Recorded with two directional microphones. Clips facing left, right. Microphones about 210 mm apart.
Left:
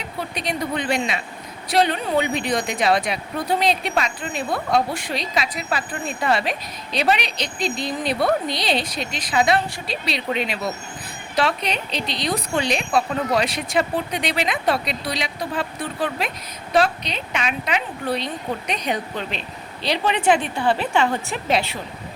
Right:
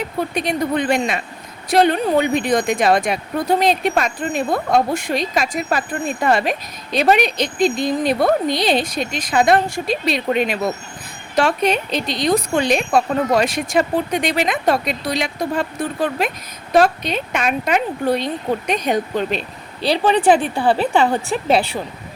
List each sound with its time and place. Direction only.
0.3 s speech: 50° right (ahead or behind)
19.8 s a woman's voice: 35° right (ahead or behind)